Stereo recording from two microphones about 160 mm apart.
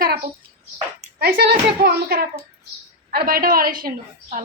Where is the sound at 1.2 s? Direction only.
90° right.